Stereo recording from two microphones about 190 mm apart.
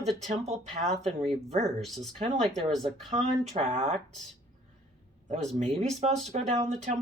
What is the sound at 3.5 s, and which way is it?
Speech, 35° right (ahead or behind).